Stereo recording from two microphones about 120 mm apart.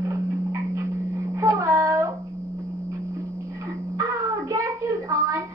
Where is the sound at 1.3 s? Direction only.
25° right (ahead or behind).